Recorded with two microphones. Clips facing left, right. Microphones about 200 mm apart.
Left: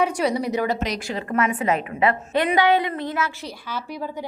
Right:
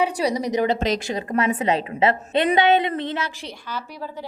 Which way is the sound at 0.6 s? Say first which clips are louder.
Right 3 dB; 25° right (ahead or behind).